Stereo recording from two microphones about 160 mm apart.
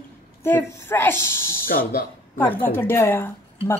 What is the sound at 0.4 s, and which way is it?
Speech, 15° left (ahead or behind).